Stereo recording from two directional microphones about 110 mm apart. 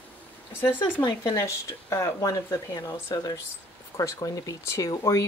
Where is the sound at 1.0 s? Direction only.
30° left (ahead or behind).